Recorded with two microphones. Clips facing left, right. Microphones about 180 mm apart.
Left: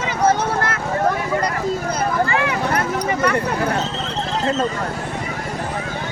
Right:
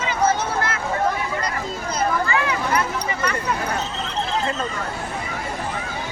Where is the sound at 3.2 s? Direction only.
60° left (ahead or behind).